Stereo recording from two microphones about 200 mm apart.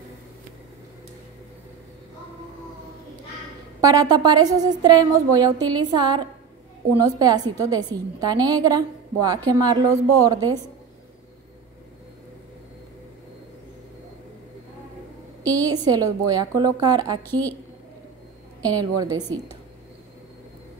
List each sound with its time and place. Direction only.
3.8 s a woman's voice: 15° right (ahead or behind)
15.4 s a woman's voice: 20° right (ahead or behind)
18.6 s a woman's voice: 20° right (ahead or behind)
19.1 s a woman's voice: 10° left (ahead or behind)